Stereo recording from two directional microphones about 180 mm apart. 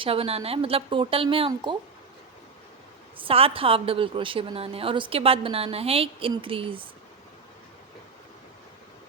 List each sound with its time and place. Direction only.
0.0 s a woman's voice: 30° right (ahead or behind)
3.2 s a woman's voice: 30° right (ahead or behind)